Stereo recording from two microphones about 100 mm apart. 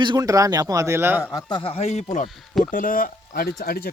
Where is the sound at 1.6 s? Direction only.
80° left.